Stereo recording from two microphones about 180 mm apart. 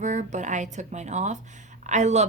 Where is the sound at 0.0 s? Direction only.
40° right (ahead or behind).